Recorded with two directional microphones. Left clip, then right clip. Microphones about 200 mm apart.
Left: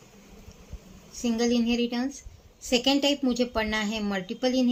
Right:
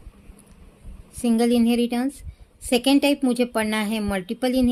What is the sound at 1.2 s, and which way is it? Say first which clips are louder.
Speech: right 5 dB; 55° right (ahead or behind).